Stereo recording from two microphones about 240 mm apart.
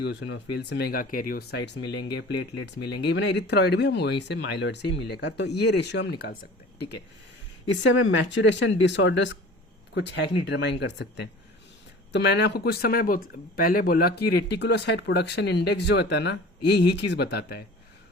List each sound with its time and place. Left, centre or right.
0.0 s speech: left
7.7 s speech: left